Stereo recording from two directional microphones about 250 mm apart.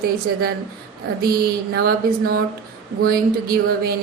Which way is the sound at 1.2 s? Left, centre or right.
Right.